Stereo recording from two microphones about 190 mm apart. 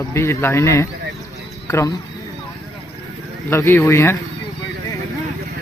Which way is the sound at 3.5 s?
15° left (ahead or behind).